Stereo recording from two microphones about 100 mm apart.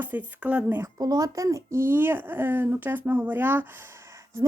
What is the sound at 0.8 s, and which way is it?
Speech, 35° right (ahead or behind).